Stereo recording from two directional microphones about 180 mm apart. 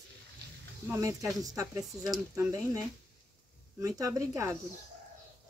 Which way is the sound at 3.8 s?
20° right (ahead or behind).